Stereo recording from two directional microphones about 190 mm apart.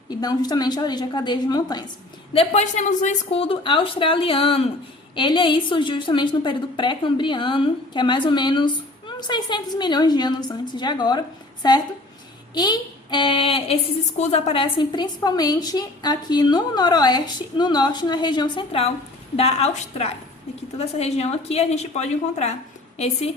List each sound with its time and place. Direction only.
0.1 s a woman's voice: 20° left (ahead or behind)
2.3 s a woman's voice: 35° left (ahead or behind)